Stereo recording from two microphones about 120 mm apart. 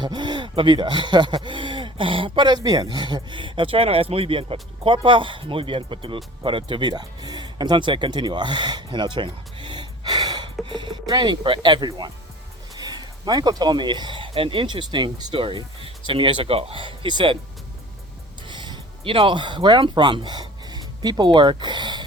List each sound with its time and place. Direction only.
0.0 s speech: 40° right (ahead or behind)
18.4 s speech: 40° right (ahead or behind)